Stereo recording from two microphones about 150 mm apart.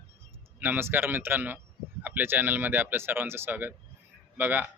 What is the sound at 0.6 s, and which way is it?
Speech, 15° right (ahead or behind).